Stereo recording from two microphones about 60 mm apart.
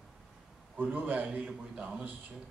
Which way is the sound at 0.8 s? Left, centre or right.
Right.